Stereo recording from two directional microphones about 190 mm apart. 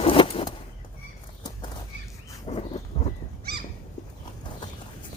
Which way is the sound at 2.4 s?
30° left (ahead or behind).